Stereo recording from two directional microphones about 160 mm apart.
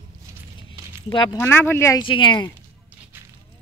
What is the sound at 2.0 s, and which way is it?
Speech, 30° left (ahead or behind).